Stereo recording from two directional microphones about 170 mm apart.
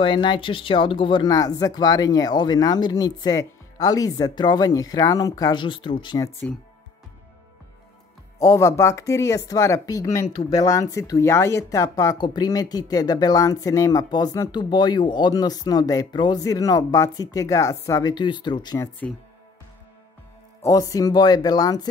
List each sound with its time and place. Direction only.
0.0 s speech: 25° left (ahead or behind)
8.4 s speech: 20° left (ahead or behind)
20.6 s speech: 20° left (ahead or behind)